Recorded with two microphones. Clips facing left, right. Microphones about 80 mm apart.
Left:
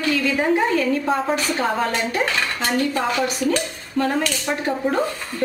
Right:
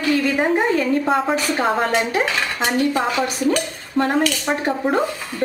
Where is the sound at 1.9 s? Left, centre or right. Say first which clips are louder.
Right 3 dB; centre.